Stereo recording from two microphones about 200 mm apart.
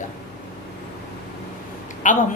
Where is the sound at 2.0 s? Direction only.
40° left (ahead or behind).